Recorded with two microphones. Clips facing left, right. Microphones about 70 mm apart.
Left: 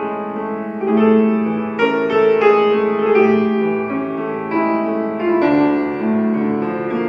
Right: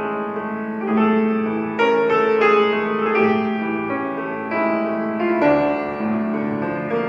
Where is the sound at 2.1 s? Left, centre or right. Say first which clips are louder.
Left 3 dB; centre.